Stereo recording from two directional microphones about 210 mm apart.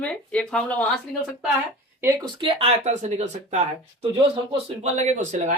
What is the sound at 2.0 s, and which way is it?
Speech, 20° right (ahead or behind).